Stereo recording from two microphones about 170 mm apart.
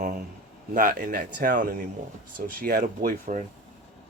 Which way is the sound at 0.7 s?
50° right (ahead or behind).